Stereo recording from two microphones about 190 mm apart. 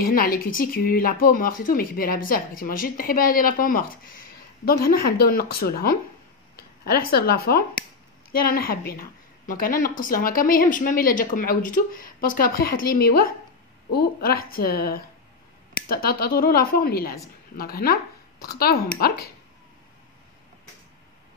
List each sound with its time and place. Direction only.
0.0 s speech: 50° left (ahead or behind)